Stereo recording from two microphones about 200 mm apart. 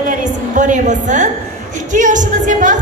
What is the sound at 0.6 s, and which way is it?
A woman's voice, 40° right (ahead or behind).